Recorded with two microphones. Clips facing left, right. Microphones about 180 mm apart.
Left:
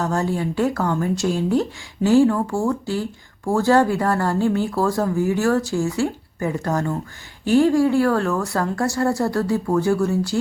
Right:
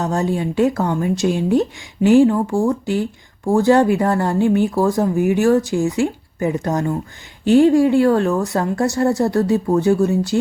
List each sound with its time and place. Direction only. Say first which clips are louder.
0.0 s speech: right 2 dB; 20° right (ahead or behind)